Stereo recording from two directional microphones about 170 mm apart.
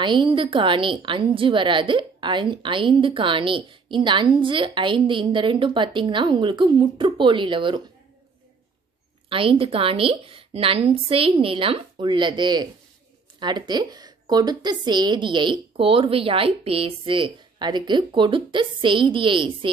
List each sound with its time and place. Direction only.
0.0 s a woman's voice: 30° right (ahead or behind)
9.3 s a woman's voice: 30° right (ahead or behind)